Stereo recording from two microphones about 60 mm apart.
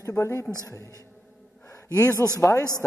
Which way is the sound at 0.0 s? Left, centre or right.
Left.